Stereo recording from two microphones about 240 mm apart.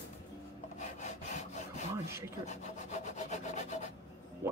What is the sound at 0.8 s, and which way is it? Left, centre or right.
Wood, left.